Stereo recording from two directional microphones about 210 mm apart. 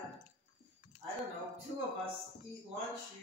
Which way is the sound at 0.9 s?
35° left (ahead or behind).